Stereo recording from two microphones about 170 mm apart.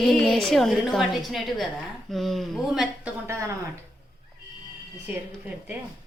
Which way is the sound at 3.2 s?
15° right (ahead or behind).